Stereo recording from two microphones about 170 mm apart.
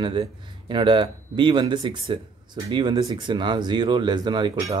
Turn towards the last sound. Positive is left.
turn(degrees=-25)  # may be behind; listen again after turning